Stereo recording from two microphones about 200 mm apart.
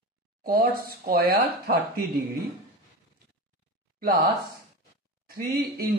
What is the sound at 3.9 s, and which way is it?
Speech, 45° right (ahead or behind).